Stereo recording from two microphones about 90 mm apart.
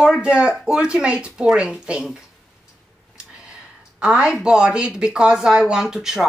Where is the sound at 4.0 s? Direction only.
10° right (ahead or behind).